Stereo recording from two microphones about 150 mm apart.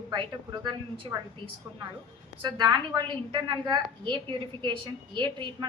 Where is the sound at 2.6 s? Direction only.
30° right (ahead or behind).